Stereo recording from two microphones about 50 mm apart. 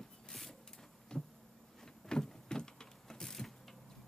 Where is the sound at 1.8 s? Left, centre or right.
Centre.